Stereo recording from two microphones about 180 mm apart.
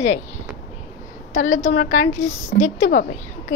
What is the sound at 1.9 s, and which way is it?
Speech, 40° left (ahead or behind).